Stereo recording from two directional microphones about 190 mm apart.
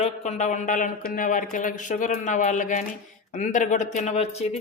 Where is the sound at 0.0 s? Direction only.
35° left (ahead or behind).